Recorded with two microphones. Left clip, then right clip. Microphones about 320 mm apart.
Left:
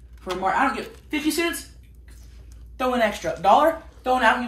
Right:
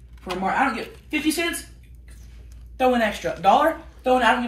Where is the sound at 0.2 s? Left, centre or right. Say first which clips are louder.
Even; centre.